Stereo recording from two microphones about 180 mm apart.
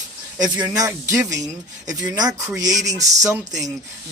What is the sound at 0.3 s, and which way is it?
Speech, 20° right (ahead or behind).